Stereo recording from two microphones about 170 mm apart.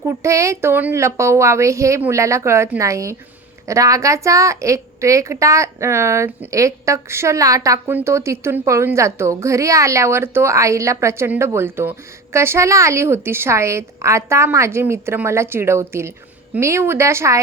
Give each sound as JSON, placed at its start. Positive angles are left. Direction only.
{"t": 0.0, "sound": "a woman's voice", "side_deg": -15}